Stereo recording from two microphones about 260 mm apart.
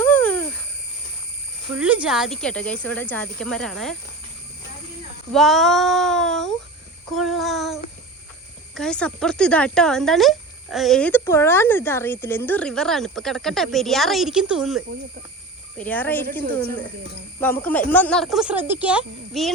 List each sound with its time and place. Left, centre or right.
0.0 s a sound: centre
1.7 s speech: centre
5.3 s speech: centre
17.4 s speech: centre